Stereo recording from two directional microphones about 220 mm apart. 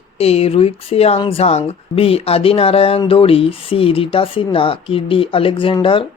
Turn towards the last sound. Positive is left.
turn(degrees=25)  # may be behind; listen again after turning